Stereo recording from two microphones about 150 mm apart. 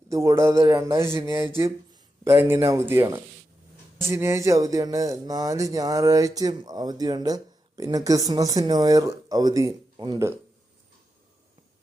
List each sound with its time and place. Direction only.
0.1 s speech: 20° right (ahead or behind)